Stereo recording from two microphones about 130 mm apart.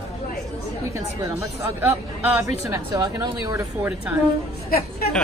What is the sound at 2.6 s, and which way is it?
Speech, 30° right (ahead or behind).